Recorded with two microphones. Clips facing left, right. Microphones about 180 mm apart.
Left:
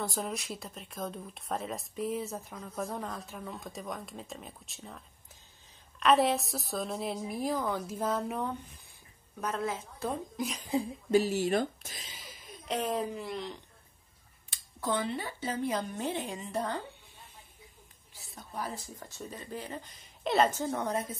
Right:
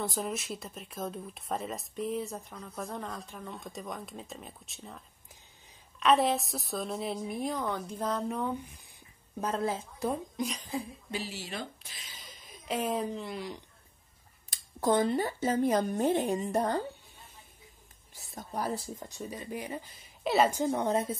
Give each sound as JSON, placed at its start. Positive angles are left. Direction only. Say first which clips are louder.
{"t": 0.0, "sound": "speech", "louder": "right 1 dB", "side_deg": 0}
{"t": 9.4, "sound": "a woman's voice", "louder": "right 2 dB", "side_deg": -30}
{"t": 10.3, "sound": "a woman's voice", "louder": "right 1 dB", "side_deg": 0}
{"t": 11.1, "sound": "speech", "louder": "left 12 dB", "side_deg": 45}
{"t": 12.2, "sound": "a sound", "louder": "left 3 dB", "side_deg": 0}
{"t": 13.1, "sound": "speech", "louder": "even", "side_deg": 0}
{"t": 14.5, "sound": "speech", "louder": "right 6 dB", "side_deg": -45}
{"t": 18.1, "sound": "a woman's voice", "louder": "right 4 dB", "side_deg": -45}
{"t": 18.9, "sound": "a woman's voice", "louder": "right 3 dB", "side_deg": -15}